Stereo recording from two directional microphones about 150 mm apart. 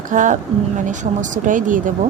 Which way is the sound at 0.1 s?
60° right (ahead or behind).